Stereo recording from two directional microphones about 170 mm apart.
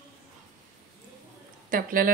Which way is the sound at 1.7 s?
55° right (ahead or behind).